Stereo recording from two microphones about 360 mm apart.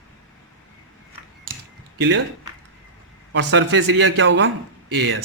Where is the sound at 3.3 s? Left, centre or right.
Right.